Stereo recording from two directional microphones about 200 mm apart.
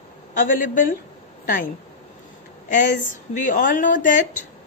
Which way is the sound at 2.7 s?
40° left (ahead or behind).